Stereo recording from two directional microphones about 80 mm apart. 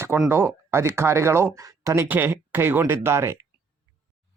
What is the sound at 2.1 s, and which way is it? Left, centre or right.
Speech, right.